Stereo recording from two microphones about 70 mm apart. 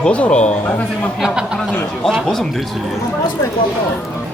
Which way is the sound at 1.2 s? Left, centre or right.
Centre.